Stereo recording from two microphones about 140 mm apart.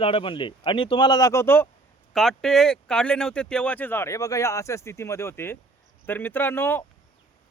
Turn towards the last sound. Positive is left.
turn(degrees=15)  # may be behind; listen again after turning